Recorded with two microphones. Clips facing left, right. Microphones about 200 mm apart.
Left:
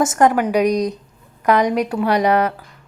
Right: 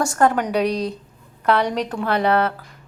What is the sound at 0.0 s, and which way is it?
A woman's voice, 20° left (ahead or behind).